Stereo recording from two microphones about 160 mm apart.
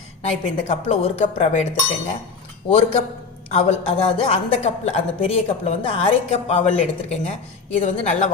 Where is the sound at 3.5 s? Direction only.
45° left (ahead or behind).